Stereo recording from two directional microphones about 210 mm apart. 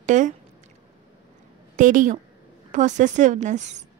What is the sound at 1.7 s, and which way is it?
A woman's voice, 40° right (ahead or behind).